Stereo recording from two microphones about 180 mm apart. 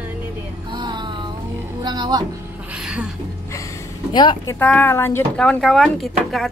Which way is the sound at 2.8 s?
5° right (ahead or behind).